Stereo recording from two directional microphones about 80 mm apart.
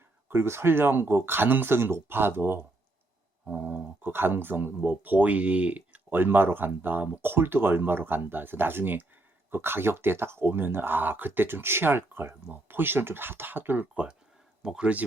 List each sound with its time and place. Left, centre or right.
0.3 s speech: right; by 15.0 s centre